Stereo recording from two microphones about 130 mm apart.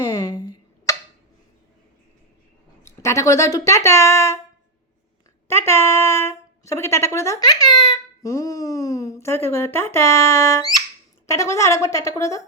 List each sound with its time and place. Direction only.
0.1 s a sound: 30° left (ahead or behind)
2.8 s speech: 20° left (ahead or behind)
5.5 s speech: 20° left (ahead or behind)